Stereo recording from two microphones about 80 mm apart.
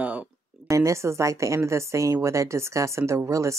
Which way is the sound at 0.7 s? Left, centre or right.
Right.